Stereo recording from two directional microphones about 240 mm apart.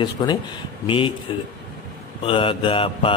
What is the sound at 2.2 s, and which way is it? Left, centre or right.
Speech, left.